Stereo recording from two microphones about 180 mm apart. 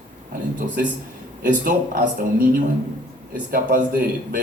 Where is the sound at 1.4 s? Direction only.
50° right (ahead or behind).